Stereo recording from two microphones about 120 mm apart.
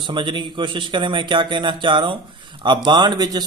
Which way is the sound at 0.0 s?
45° right (ahead or behind).